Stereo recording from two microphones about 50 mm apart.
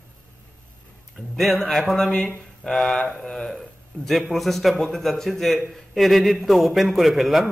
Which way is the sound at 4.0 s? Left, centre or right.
Left.